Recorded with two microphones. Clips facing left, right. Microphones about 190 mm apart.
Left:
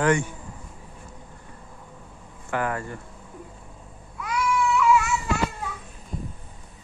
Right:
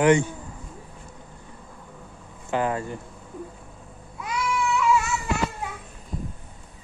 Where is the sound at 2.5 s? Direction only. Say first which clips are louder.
Right 2 dB; 20° right (ahead or behind).